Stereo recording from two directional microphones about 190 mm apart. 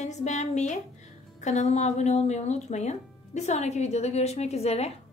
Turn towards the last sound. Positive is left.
turn(degrees=35)  # may be behind; listen again after turning